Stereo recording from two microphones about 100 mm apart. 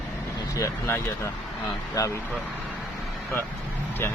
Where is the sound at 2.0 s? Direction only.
40° left (ahead or behind).